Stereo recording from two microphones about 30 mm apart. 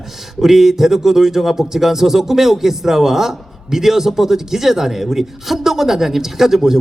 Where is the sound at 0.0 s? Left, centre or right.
Centre.